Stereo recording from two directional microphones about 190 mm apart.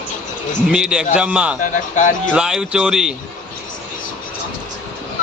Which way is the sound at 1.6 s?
40° left (ahead or behind).